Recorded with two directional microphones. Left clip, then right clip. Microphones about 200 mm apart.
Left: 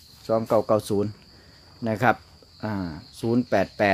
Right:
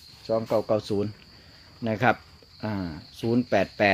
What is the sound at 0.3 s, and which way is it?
Speech, 20° left (ahead or behind).